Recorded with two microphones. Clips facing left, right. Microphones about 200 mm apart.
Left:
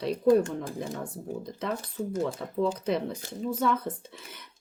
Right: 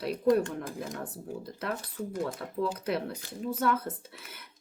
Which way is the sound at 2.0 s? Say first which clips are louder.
Left 4 dB; 25° left (ahead or behind).